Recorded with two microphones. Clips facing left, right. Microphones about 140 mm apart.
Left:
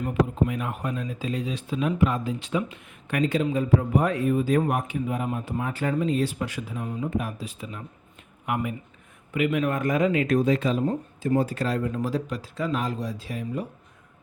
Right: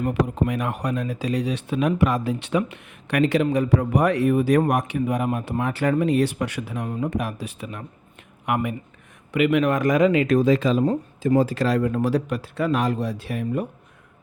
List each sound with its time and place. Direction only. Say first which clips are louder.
0.0 s speech: right 2 dB; 70° right (ahead or behind)
9.3 s speech: right 5 dB; 85° right; by 13.7 s 60° right (ahead or behind)